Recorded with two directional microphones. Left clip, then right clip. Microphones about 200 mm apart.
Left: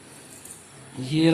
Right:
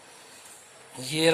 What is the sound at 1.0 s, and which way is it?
Speech, 35° right (ahead or behind).